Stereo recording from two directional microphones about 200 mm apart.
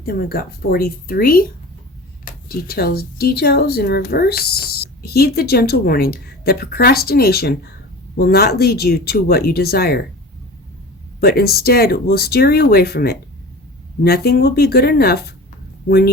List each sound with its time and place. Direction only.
0.0 s speech: 50° left (ahead or behind)
2.5 s speech: 50° left (ahead or behind)
11.2 s speech: 50° left (ahead or behind)